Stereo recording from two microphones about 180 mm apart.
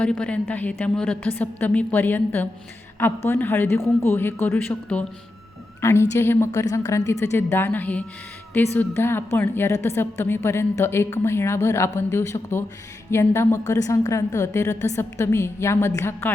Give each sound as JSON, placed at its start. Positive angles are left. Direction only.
{"t": 0.0, "sound": "a woman's voice", "side_deg": 5}